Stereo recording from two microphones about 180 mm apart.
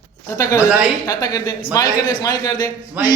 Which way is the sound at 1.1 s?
20° left (ahead or behind).